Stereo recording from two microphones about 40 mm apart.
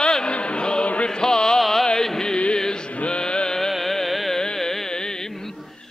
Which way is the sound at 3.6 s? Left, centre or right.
Centre.